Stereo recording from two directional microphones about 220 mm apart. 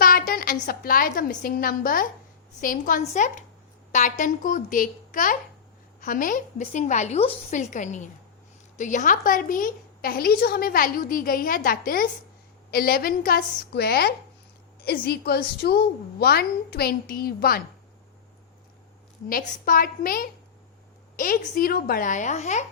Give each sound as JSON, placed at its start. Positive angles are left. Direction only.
{"t": 0.0, "sound": "a woman's voice", "side_deg": 40}
{"t": 19.3, "sound": "a woman's voice", "side_deg": 40}